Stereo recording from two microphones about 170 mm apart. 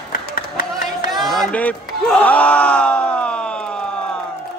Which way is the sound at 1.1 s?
Centre (ahead or behind).